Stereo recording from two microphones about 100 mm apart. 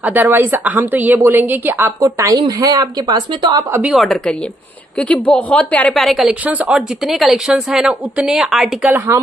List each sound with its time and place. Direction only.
0.0 s a woman's voice: 15° right (ahead or behind)
2.0 s a woman's voice: 35° right (ahead or behind)
4.9 s a woman's voice: 15° left (ahead or behind)
5.9 s speech: centre (ahead or behind)
8.9 s a woman's voice: 25° right (ahead or behind)